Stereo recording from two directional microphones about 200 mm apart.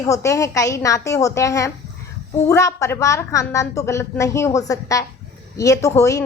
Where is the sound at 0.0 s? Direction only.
15° left (ahead or behind).